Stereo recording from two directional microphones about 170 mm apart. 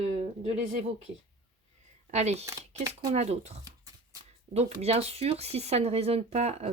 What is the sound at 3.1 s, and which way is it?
Speech, 40° right (ahead or behind).